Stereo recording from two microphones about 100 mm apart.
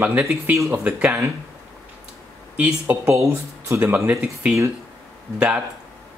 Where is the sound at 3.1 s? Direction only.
30° right (ahead or behind).